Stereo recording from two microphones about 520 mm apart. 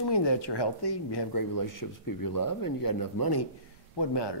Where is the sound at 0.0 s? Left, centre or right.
Left.